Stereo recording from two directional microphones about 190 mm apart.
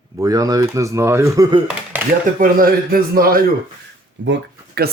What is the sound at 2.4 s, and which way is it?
A man's voice, 50° right (ahead or behind).